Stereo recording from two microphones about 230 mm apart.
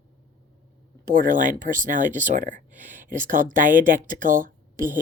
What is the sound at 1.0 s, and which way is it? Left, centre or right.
Speech, right.